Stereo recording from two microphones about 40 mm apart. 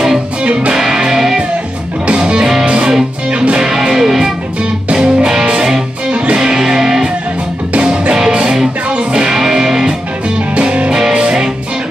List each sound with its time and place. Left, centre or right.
0.4 s music: right
0.7 s music: centre
3.6 s music: centre
7.7 s music: right
10.5 s music: right
10.9 s music: centre